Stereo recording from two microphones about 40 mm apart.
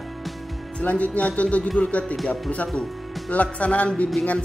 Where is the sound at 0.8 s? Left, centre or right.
Left.